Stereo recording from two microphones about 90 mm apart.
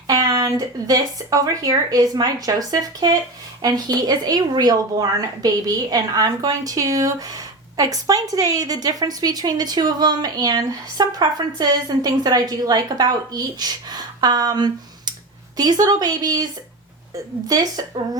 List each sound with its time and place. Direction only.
0.1 s a woman's voice: 45° right (ahead or behind)
17.5 s a woman's voice: 45° right (ahead or behind)